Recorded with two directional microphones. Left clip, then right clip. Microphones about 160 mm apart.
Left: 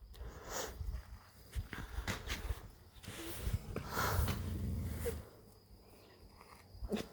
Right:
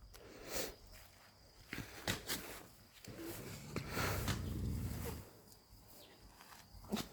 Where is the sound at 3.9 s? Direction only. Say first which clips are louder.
Left 3 dB; 45° right (ahead or behind).